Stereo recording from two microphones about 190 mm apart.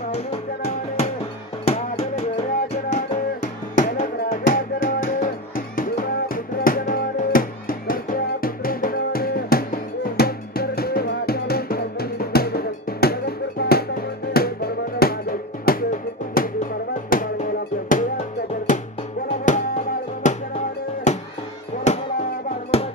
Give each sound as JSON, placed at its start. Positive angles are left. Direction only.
{"t": 0.1, "sound": "music", "side_deg": 30}
{"t": 3.7, "sound": "music", "side_deg": 45}
{"t": 17.1, "sound": "drum", "side_deg": 45}
{"t": 18.7, "sound": "music", "side_deg": 40}
{"t": 21.9, "sound": "a sound", "side_deg": 35}